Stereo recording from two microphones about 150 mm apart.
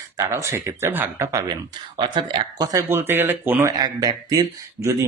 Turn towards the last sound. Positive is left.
turn(degrees=-20)  # may be behind; listen again after turning